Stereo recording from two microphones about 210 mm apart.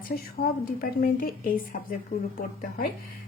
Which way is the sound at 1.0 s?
40° left (ahead or behind).